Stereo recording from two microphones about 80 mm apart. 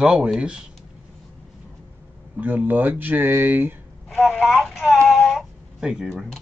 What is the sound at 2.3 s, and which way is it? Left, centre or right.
Speech, right.